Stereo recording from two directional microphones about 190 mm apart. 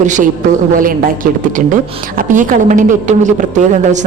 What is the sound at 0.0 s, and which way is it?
A woman's voice, 40° right (ahead or behind).